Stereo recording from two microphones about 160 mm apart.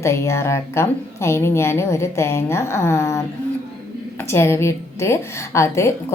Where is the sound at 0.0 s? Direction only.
15° left (ahead or behind).